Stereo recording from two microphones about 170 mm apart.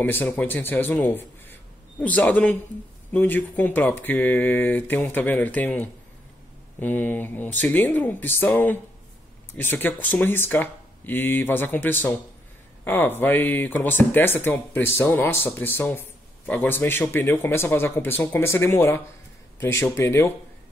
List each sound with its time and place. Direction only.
0.0 s speech: 10° left (ahead or behind)